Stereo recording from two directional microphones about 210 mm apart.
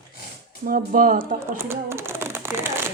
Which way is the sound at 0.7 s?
40° right (ahead or behind).